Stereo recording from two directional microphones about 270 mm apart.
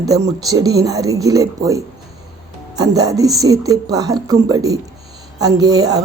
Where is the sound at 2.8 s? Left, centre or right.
Centre.